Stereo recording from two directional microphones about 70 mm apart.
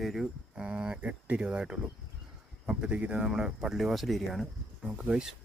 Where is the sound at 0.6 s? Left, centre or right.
Centre.